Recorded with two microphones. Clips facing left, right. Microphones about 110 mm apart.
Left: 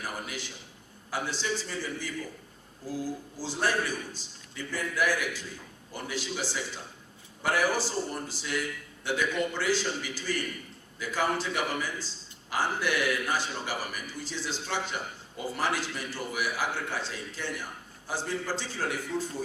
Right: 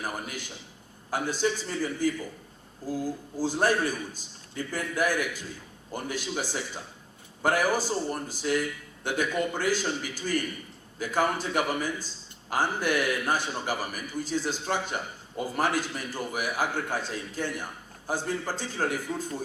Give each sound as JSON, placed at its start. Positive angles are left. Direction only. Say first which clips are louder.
{"t": 0.0, "sound": "a man's voice", "louder": "right 2 dB", "side_deg": -50}
{"t": 3.3, "sound": "a man's voice", "louder": "right 5 dB", "side_deg": -50}